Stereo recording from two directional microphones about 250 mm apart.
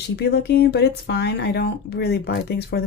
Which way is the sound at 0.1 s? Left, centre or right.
Left.